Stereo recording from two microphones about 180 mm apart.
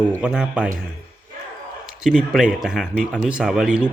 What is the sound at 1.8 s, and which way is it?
Speech, 5° right (ahead or behind).